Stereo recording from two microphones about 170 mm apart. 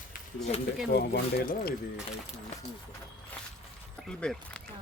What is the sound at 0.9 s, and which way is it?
Speech, 70° left (ahead or behind).